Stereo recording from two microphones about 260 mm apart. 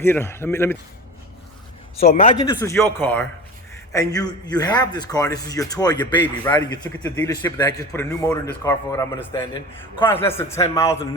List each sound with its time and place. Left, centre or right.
0.0 s a man's voice: centre
2.2 s a man's voice: centre